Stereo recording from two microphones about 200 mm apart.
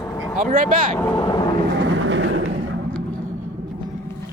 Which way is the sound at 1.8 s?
65° right (ahead or behind).